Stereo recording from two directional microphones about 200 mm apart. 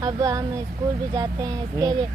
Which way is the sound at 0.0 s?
15° right (ahead or behind).